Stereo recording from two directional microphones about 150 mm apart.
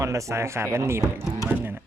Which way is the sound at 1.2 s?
20° right (ahead or behind).